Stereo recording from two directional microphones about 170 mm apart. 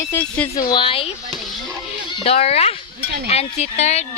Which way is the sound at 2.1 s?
35° left (ahead or behind).